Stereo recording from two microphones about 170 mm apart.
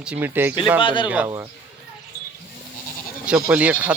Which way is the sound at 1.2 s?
20° right (ahead or behind).